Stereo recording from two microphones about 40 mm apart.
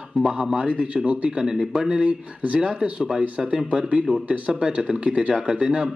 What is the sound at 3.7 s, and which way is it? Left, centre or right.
Speech, right.